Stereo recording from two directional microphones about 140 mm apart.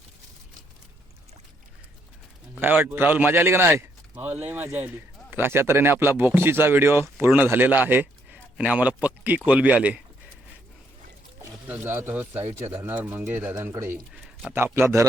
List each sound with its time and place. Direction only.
2.6 s a man's voice: 15° right (ahead or behind)
11.7 s speech: 15° right (ahead or behind)